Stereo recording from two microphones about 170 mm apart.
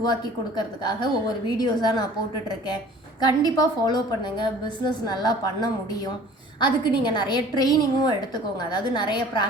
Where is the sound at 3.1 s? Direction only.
25° left (ahead or behind).